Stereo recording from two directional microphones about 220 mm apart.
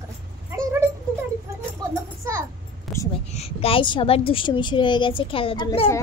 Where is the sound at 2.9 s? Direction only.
Centre (ahead or behind).